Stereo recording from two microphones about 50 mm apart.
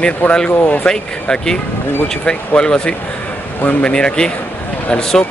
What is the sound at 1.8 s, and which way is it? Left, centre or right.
Speech, left.